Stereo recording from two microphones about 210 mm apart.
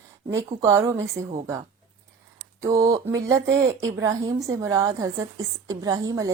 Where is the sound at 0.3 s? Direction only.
15° right (ahead or behind).